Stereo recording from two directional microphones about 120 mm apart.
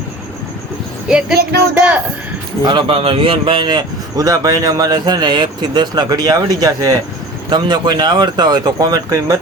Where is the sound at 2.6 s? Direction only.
45° right (ahead or behind).